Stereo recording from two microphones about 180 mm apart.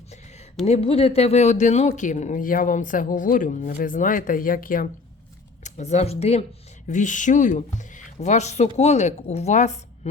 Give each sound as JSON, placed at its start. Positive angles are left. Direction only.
{"t": 0.6, "sound": "speech", "side_deg": 35}
{"t": 5.6, "sound": "speech", "side_deg": 40}